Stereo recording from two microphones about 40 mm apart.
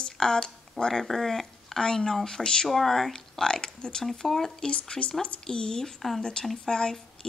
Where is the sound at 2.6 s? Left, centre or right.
Centre.